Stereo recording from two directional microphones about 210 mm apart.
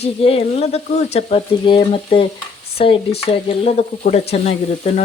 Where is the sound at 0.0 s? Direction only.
30° left (ahead or behind).